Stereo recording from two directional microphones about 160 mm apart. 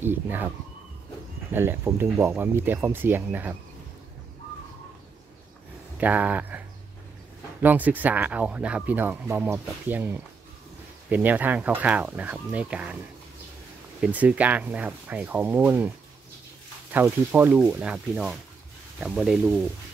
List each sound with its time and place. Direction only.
0.0 s speech: 15° right (ahead or behind)
1.5 s speech: 15° right (ahead or behind)
5.9 s speech: 10° right (ahead or behind)
7.6 s speech: 10° right (ahead or behind)
14.0 s speech: 10° right (ahead or behind)
16.9 s speech: 10° right (ahead or behind)